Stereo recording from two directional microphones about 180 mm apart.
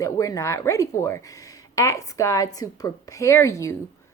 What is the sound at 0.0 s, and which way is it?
A woman's voice, 15° left (ahead or behind).